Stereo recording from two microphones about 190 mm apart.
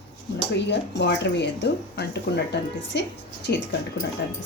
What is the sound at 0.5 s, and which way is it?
A woman's voice, 65° left (ahead or behind).